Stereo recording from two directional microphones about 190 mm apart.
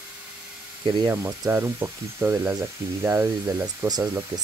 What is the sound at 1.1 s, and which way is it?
Speech, 15° right (ahead or behind).